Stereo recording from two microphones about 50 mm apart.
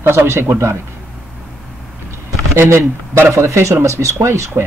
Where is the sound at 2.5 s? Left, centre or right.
Right.